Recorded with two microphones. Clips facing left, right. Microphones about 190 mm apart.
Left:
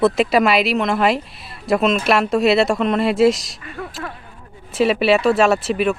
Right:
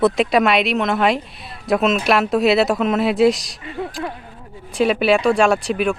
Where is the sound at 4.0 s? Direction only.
20° right (ahead or behind).